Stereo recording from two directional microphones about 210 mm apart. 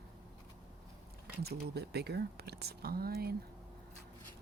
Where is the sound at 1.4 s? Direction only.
50° right (ahead or behind).